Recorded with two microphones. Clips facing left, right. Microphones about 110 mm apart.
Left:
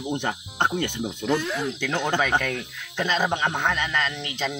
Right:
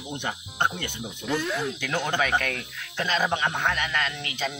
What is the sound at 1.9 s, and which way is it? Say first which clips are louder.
Speech: left 2 dB; 15° left (ahead or behind).